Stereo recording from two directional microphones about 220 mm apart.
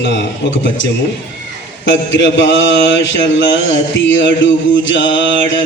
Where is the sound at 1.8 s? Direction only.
55° left (ahead or behind).